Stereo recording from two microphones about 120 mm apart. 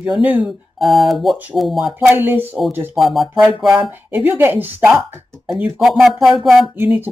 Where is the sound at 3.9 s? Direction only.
15° right (ahead or behind).